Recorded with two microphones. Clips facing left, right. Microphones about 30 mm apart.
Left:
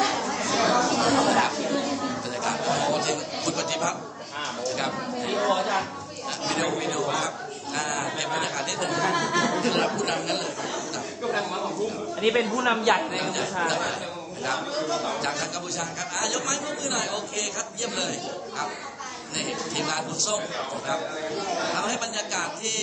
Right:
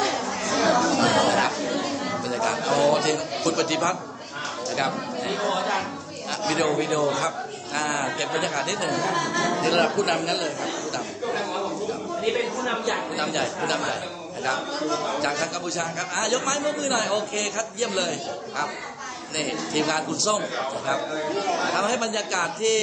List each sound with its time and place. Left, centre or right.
0.0 s chatter: centre
2.9 s a man's voice: centre
8.8 s a man's voice: centre
11.3 s a sound: centre
12.6 s speech: left
13.2 s a man's voice: centre
14.4 s a man's voice: centre
15.8 s a man's voice: centre
19.3 s a man's voice: centre